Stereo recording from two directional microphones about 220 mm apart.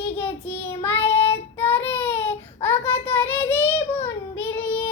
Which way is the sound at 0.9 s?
25° left (ahead or behind).